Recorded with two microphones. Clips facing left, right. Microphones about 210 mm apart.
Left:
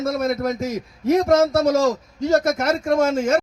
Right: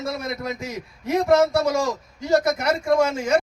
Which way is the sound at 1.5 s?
45° left (ahead or behind).